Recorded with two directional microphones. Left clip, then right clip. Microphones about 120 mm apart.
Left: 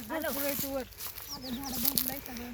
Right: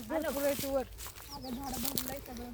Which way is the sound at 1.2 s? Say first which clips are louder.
Left 2 dB; 55° right (ahead or behind).